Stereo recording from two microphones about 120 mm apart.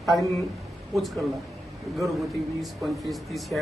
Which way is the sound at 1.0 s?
Centre (ahead or behind).